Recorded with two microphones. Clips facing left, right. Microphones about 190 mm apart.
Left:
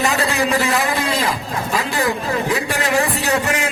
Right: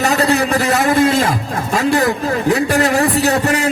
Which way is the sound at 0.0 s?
40° right (ahead or behind).